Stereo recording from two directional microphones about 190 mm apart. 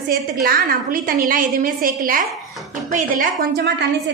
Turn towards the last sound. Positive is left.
turn(degrees=-55)  # may be behind; listen again after turning